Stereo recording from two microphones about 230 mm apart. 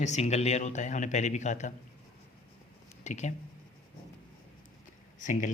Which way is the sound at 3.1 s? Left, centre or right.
Left.